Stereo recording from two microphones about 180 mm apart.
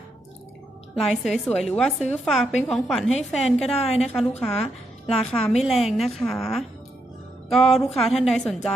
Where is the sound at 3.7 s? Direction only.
35° left (ahead or behind).